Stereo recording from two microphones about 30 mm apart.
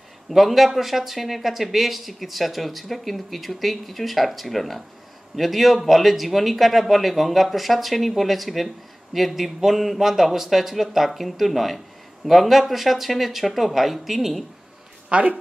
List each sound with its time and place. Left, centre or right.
0.3 s speech: centre
15.0 s speech: right